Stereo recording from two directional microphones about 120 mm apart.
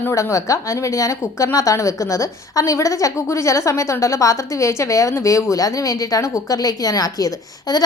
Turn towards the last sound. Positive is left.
turn(degrees=35)  # may be behind; listen again after turning